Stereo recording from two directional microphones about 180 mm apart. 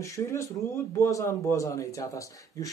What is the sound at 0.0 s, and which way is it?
Speech, 15° left (ahead or behind).